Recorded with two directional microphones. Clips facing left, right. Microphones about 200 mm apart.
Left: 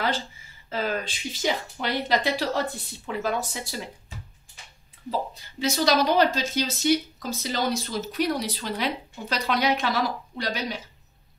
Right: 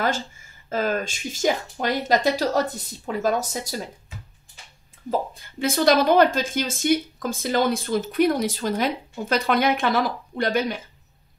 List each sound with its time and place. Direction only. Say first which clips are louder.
0.0 s speech: right 3 dB; 45° right (ahead or behind)
5.1 s speech: right 4 dB; 50° right (ahead or behind)